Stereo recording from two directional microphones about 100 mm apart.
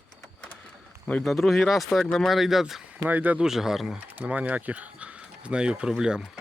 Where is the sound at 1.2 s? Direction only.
Centre (ahead or behind).